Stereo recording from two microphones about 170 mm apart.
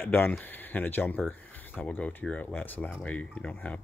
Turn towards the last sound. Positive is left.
turn(degrees=10)  # may be behind; listen again after turning